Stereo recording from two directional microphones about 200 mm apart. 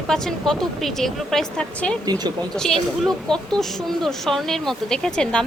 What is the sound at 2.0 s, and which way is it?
Speech, 20° right (ahead or behind).